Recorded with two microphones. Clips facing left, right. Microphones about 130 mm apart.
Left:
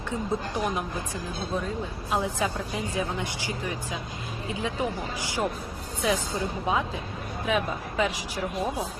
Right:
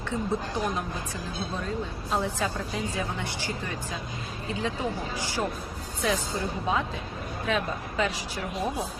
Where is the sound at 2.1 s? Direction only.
15° left (ahead or behind).